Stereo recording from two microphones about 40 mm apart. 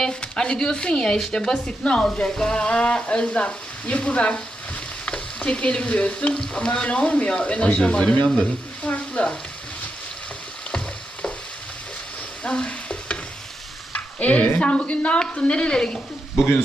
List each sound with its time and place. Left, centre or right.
0.3 s speech: centre
5.4 s speech: left
12.4 s frying: centre
12.6 s stir: left
15.2 s speech: left